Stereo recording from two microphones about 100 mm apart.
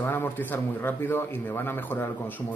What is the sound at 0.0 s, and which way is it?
A man's voice, 20° left (ahead or behind).